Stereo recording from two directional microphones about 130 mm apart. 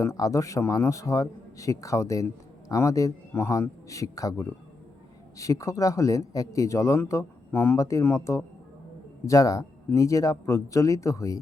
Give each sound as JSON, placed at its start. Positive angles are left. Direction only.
{"t": 0.0, "sound": "a man's voice", "side_deg": 25}